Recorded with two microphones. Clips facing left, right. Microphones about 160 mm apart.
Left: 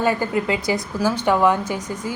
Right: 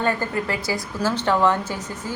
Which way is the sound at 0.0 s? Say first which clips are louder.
Left 3 dB; 15° left (ahead or behind).